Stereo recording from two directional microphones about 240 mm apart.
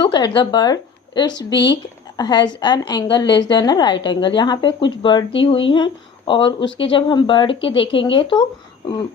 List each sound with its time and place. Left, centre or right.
0.0 s speech: centre
1.5 s speech: left
2.1 s a woman's voice: centre